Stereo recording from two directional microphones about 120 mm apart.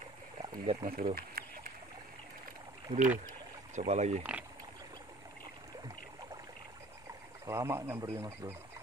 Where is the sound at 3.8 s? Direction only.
70° right (ahead or behind).